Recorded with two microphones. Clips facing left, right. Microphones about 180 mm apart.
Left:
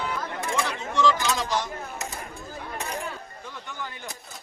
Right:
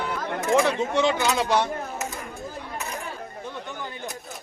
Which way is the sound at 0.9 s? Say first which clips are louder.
Right 1 dB; 65° right (ahead or behind).